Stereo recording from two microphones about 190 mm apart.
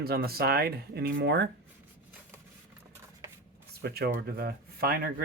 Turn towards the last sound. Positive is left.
turn(degrees=-50)  # may be behind; listen again after turning